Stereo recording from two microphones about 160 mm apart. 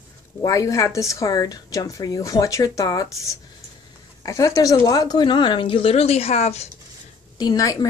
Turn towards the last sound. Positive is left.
turn(degrees=20)  # may be behind; listen again after turning